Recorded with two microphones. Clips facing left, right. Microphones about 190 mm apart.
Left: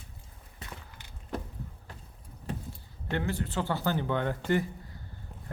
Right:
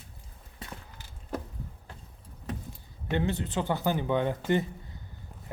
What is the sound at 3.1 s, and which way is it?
Speech, 20° right (ahead or behind).